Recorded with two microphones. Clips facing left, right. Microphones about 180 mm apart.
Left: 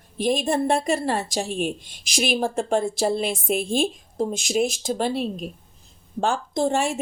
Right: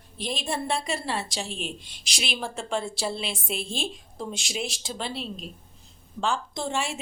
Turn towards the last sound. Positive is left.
turn(degrees=45)  # may be behind; listen again after turning